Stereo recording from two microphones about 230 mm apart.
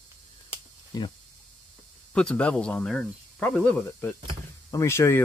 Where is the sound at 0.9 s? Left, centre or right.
Centre.